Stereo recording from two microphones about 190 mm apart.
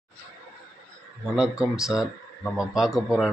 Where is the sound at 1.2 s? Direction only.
5° right (ahead or behind).